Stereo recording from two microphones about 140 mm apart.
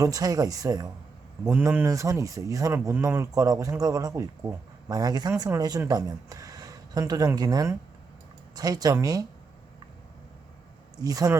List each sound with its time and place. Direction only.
0.0 s speech: 25° right (ahead or behind)
11.0 s speech: 25° right (ahead or behind)